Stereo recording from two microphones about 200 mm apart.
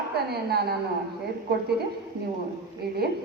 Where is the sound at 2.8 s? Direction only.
50° right (ahead or behind).